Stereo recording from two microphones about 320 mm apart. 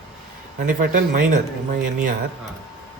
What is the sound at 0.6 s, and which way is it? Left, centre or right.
Speech, right.